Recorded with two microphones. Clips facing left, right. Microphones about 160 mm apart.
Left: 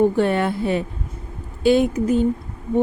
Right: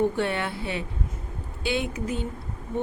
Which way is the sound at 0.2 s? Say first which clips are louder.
Left 8 dB; 45° left (ahead or behind).